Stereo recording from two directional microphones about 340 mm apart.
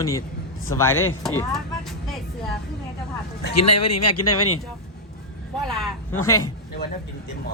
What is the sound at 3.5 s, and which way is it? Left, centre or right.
Speech, left.